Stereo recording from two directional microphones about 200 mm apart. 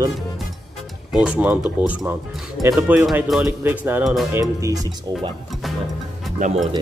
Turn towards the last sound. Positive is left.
turn(degrees=-40)  # may be behind; listen again after turning